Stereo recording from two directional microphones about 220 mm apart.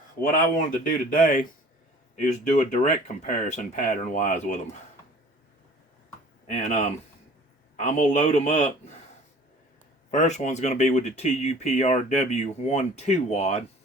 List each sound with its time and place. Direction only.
0.2 s speech: 40° left (ahead or behind)
6.5 s speech: 30° left (ahead or behind)
10.1 s speech: 35° left (ahead or behind)